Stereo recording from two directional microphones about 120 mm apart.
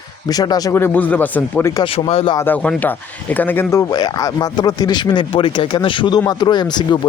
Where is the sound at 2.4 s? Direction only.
15° left (ahead or behind).